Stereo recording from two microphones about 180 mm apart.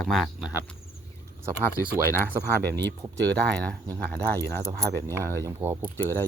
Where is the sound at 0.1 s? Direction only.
5° right (ahead or behind).